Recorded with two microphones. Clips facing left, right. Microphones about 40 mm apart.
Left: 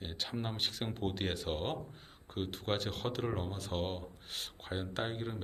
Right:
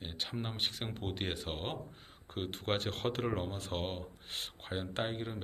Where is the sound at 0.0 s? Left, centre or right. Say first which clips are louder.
Even; centre.